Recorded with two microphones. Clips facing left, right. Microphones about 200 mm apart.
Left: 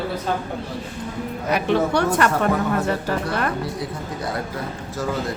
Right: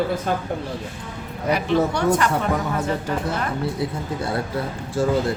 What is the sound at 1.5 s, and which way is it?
Speech, 60° left (ahead or behind).